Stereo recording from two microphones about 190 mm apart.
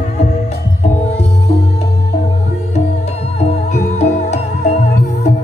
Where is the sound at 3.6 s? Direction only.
40° left (ahead or behind).